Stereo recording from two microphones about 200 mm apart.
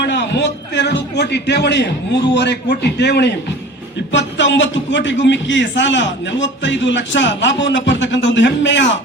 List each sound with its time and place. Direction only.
0.0 s a man's voice: 60° left (ahead or behind)